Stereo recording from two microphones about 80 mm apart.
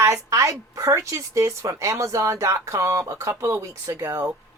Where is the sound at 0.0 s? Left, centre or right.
Right.